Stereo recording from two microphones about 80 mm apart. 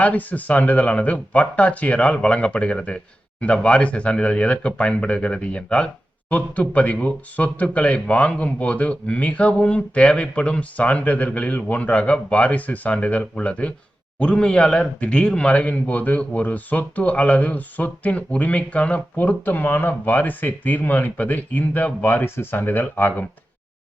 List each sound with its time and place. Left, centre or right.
0.0 s speech: centre